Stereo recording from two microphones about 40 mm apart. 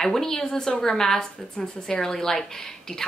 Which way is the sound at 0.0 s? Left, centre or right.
Centre.